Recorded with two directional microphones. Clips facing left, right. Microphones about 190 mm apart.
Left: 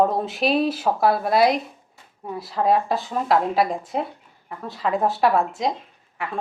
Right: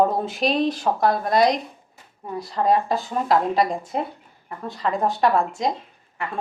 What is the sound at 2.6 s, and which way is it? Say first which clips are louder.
Speech: even; centre (ahead or behind).